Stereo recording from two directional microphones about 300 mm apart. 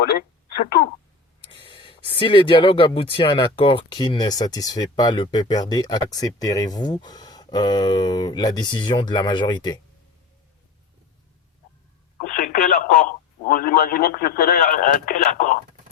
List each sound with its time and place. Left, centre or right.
0.1 s speech: left
1.4 s speech: centre
12.2 s speech: left